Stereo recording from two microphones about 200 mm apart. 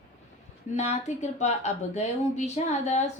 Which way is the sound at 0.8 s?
35° left (ahead or behind).